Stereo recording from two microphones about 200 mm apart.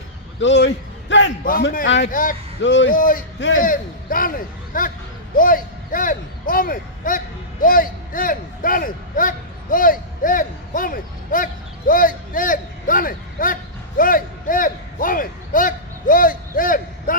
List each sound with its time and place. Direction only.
0.3 s a man's voice: 65° left (ahead or behind)
1.5 s speech: 45° left (ahead or behind)
2.6 s a man's voice: 65° left (ahead or behind)
2.9 s a man's voice: 45° left (ahead or behind)
11.9 s a sound: 45° left (ahead or behind)